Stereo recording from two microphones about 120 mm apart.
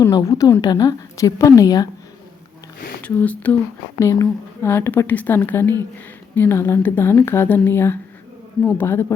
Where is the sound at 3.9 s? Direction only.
25° left (ahead or behind).